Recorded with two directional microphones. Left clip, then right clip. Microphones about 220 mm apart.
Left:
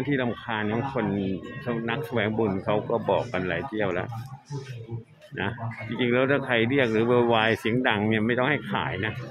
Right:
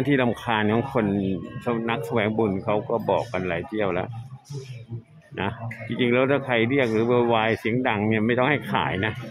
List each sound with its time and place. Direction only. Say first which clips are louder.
0.1 s speech: right 6 dB; 15° right (ahead or behind)
5.4 s speech: right 2 dB; 10° right (ahead or behind)